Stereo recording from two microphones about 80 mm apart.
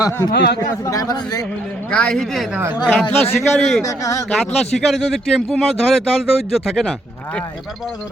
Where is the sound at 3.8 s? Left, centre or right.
Left.